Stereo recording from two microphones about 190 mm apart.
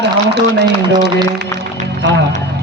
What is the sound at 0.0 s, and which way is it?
Speech, 60° right (ahead or behind).